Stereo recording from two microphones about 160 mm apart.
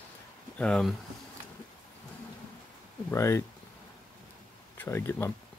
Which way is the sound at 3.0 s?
15° left (ahead or behind).